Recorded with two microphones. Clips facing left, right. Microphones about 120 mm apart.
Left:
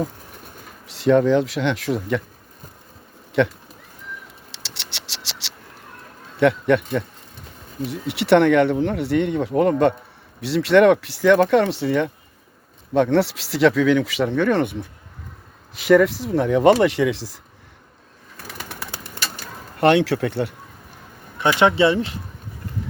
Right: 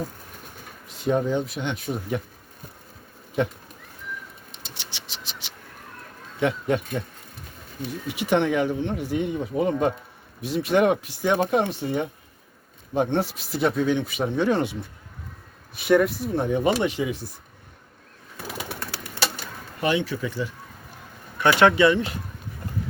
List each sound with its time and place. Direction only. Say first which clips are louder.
0.9 s speech: left 7 dB; 85° left
3.4 s speech: left 6 dB; 75° left (ahead or behind)
4.5 s scratch: left 3 dB; 80° left
6.4 s speech: left 7 dB; 65° left (ahead or behind)
15.7 s speech: left 4 dB; 90° left
19.8 s speech: left 8 dB; 75° left (ahead or behind)
21.3 s speech: left 1 dB; 25° left (ahead or behind)